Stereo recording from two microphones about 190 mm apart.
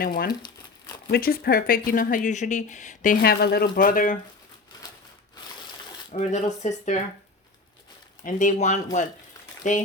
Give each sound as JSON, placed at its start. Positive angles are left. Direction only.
{"t": 0.0, "sound": "speech", "side_deg": 50}
{"t": 6.1, "sound": "speech", "side_deg": 35}
{"t": 8.2, "sound": "speech", "side_deg": 40}